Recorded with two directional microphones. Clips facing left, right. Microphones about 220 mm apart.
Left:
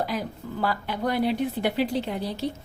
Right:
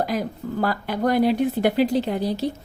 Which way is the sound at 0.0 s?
45° right (ahead or behind).